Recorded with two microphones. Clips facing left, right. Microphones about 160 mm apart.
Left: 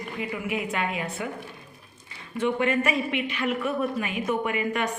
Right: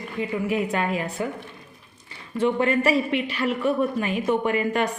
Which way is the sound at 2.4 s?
35° right (ahead or behind).